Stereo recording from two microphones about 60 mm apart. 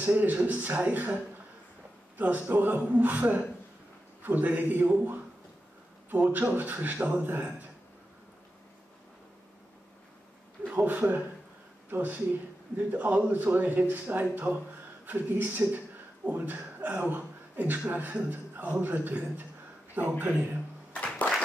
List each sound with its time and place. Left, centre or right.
0.0 s a man's voice: right
10.6 s a man's voice: right
20.9 s music: left